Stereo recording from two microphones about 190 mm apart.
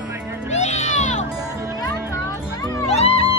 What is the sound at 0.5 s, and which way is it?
Music, 40° left (ahead or behind).